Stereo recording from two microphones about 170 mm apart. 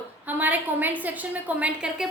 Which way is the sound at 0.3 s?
10° right (ahead or behind).